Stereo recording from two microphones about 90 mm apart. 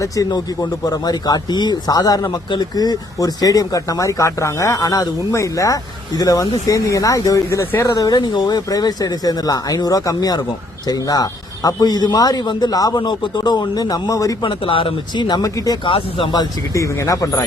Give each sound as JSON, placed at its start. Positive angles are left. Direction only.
{"t": 0.0, "sound": "speech", "side_deg": 45}
{"t": 7.6, "sound": "speech", "side_deg": 25}
{"t": 7.9, "sound": "speech", "side_deg": 45}
{"t": 14.4, "sound": "speech", "side_deg": 75}
{"t": 15.8, "sound": "speech", "side_deg": 80}
{"t": 16.7, "sound": "speech", "side_deg": 35}